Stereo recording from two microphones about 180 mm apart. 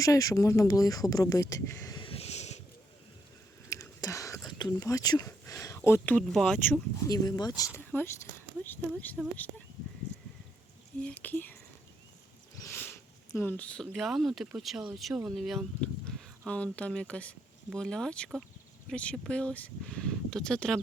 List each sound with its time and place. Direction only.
0.0 s speech: 20° left (ahead or behind); by 2.6 s 40° left (ahead or behind)
3.7 s speech: 15° left (ahead or behind)
11.0 s speech: 10° left (ahead or behind)
12.6 s a sound: 10° left (ahead or behind)
13.3 s speech: 10° left (ahead or behind)
13.9 s speech: centre (ahead or behind)
16.7 s speech: 5° left (ahead or behind)